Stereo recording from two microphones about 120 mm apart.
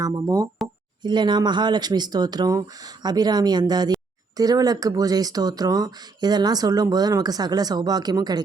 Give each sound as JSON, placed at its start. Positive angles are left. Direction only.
{"t": 0.0, "sound": "speech", "side_deg": -30}